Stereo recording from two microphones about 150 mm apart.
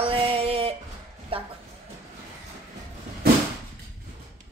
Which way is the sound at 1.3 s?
40° right (ahead or behind).